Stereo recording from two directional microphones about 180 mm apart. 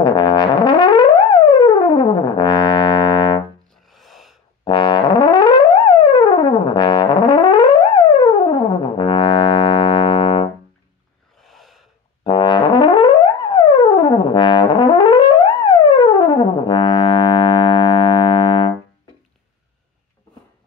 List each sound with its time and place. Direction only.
0.0 s brass instrument: 25° left (ahead or behind)
3.7 s music: centre (ahead or behind)
4.6 s brass instrument: 25° left (ahead or behind)
11.3 s gasp: centre (ahead or behind)
12.2 s brass instrument: 25° left (ahead or behind)